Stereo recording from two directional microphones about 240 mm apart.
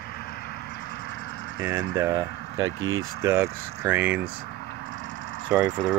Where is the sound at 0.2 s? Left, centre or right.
Left.